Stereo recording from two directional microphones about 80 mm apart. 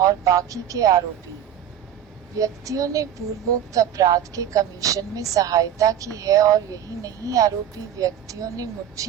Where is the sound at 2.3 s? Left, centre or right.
Right.